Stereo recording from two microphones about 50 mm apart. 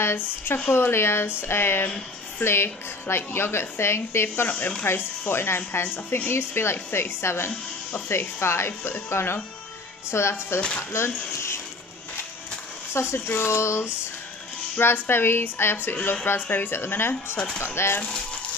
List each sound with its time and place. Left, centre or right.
0.0 s a woman's voice: left
4.5 s speech: left
4.8 s a woman's voice: left
12.9 s speech: left
13.5 s a sound: left
14.8 s a woman's voice: left